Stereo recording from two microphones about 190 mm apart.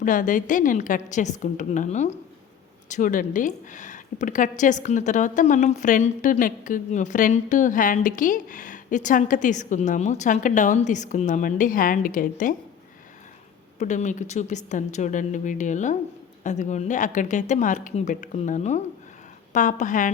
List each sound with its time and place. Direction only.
0.0 s a woman's voice: 45° left (ahead or behind)
13.7 s speech: 40° left (ahead or behind)